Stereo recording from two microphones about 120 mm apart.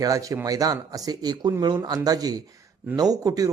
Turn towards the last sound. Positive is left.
turn(degrees=-30)  # may be behind; listen again after turning